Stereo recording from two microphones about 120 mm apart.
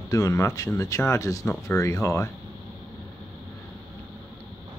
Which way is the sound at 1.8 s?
25° left (ahead or behind).